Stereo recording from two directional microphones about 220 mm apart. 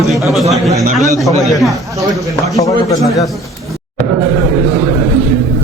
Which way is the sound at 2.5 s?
15° left (ahead or behind).